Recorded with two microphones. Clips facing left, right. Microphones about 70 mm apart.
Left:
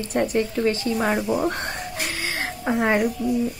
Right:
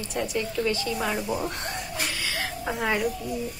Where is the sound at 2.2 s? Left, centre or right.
Left.